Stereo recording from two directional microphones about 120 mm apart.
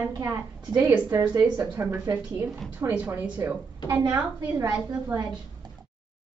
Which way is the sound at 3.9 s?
30° right (ahead or behind).